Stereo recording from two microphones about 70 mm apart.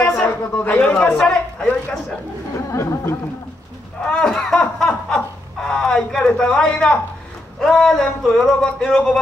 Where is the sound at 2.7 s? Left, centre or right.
Left.